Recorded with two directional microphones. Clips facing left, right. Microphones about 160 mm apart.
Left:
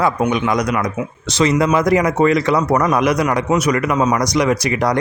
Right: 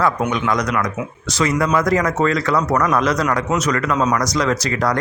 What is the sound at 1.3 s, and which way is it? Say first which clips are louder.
Speech: left 3 dB; 20° left (ahead or behind).